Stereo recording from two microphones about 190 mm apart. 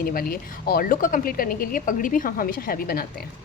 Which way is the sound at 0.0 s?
50° left (ahead or behind).